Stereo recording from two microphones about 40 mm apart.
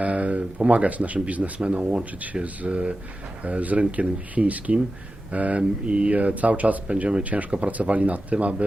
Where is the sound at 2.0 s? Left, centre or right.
Right.